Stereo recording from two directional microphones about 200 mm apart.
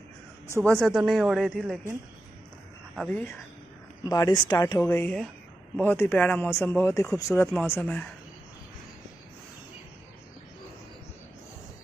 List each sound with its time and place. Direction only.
0.7 s speech: centre (ahead or behind)
3.0 s speech: 5° left (ahead or behind)
4.0 s speech: 20° left (ahead or behind)